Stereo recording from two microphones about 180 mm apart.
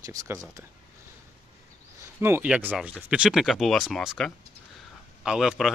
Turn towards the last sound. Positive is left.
turn(degrees=0)  # may be behind; listen again after turning